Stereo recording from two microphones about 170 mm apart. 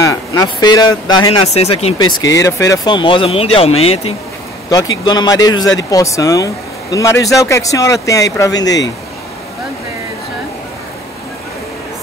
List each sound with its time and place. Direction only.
0.0 s speech: 20° left (ahead or behind)
1.4 s speech: 40° left (ahead or behind)
2.3 s speech: 20° left (ahead or behind); by 4.1 s 35° left (ahead or behind)
4.6 s speech: 25° left (ahead or behind)